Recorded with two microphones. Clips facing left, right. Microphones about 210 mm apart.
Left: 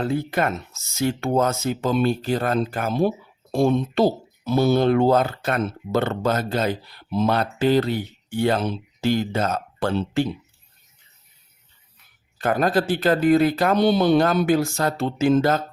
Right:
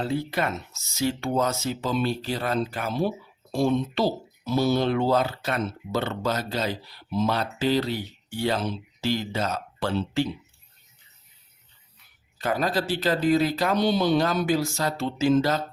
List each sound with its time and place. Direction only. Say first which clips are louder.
0.0 s speech: left 4 dB; 50° left (ahead or behind)
12.4 s speech: left 5 dB; 50° left (ahead or behind)